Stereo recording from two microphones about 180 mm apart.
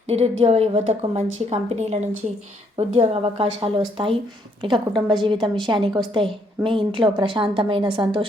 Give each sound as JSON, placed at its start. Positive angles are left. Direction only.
{"t": 0.1, "sound": "a woman's voice", "side_deg": -35}